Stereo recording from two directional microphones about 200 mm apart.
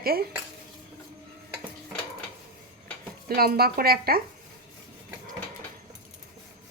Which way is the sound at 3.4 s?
50° right (ahead or behind).